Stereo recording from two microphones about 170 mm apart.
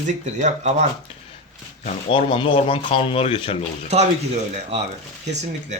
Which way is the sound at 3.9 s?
40° right (ahead or behind).